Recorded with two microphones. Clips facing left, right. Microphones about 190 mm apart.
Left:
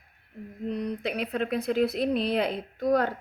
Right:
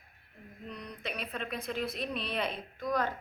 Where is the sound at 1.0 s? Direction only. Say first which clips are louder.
Left 5 dB; 75° left (ahead or behind).